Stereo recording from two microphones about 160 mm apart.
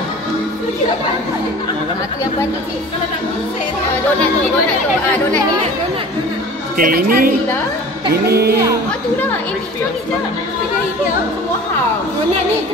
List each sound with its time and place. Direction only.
6.8 s a woman's voice: 65° right (ahead or behind)
8.3 s speech: 85° right